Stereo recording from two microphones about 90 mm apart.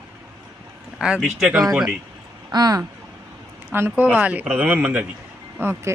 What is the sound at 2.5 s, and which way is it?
Speech, 50° right (ahead or behind).